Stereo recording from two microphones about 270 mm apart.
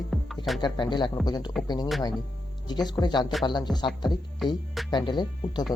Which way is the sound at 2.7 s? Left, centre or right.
Centre.